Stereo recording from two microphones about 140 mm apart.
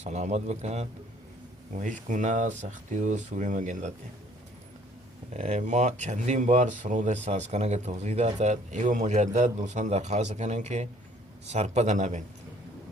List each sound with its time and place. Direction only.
0.0 s speech: 55° right (ahead or behind)
1.7 s speech: 65° right (ahead or behind)
5.3 s speech: 50° right (ahead or behind)